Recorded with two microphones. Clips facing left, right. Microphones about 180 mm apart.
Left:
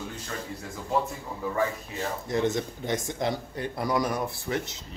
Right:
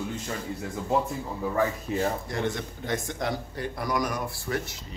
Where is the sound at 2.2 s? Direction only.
20° left (ahead or behind).